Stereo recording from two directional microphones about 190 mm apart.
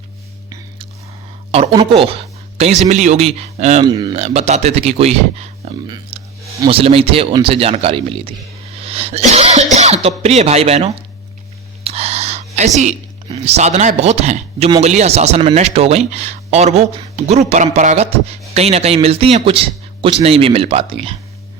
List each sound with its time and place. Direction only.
1.5 s speech: 30° right (ahead or behind)
3.8 s speech: 20° right (ahead or behind)
11.8 s a sound: 30° right (ahead or behind)
14.8 s speech: 35° right (ahead or behind)